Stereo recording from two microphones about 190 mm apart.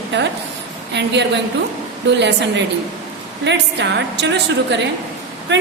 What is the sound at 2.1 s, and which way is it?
Speech, 65° right (ahead or behind).